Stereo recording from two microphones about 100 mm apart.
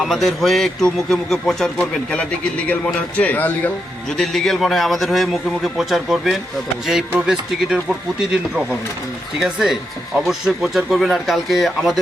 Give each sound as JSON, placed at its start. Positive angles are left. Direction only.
{"t": 0.0, "sound": "a man's voice", "side_deg": 0}
{"t": 4.2, "sound": "a man's voice", "side_deg": 0}